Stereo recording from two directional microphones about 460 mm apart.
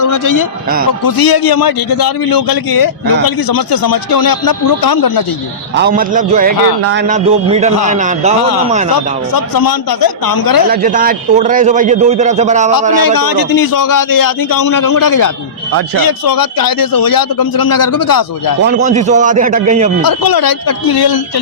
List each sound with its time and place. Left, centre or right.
0.0 s a man's voice: left
5.7 s a man's voice: centre
9.3 s a man's voice: left
10.7 s a man's voice: centre
13.0 s a man's voice: left
18.6 s a man's voice: centre
20.0 s a man's voice: left